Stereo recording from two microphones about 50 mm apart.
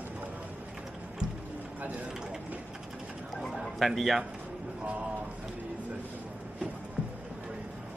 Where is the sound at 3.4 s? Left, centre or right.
Centre.